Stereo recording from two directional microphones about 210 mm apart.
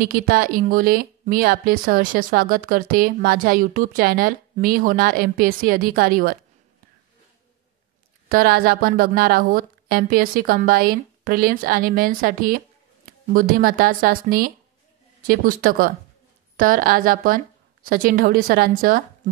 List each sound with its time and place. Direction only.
0.0 s a woman's voice: 45° right (ahead or behind)
8.3 s a woman's voice: 45° right (ahead or behind)